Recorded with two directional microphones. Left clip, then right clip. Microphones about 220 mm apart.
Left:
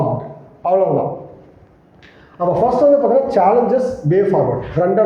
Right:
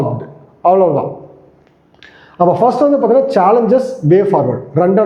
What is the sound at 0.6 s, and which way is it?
Speech, 55° right (ahead or behind).